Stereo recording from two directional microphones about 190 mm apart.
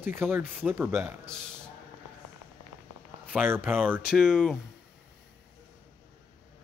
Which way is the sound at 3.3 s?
10° right (ahead or behind).